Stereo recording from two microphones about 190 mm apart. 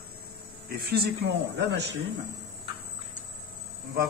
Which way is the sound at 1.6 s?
65° right (ahead or behind).